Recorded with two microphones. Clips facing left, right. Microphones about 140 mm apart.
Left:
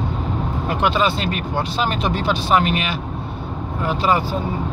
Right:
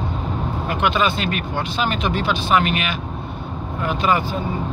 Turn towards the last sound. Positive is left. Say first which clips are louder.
# left 1 dB
turn(degrees=35)  # may be behind; listen again after turning